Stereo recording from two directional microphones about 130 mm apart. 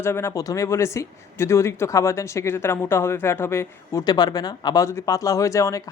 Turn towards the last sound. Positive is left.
turn(degrees=25)  # may be behind; listen again after turning